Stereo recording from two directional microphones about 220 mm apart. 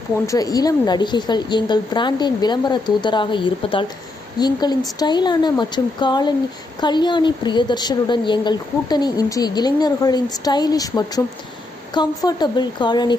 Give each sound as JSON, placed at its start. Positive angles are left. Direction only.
{"t": 0.3, "sound": "a woman's voice", "side_deg": 15}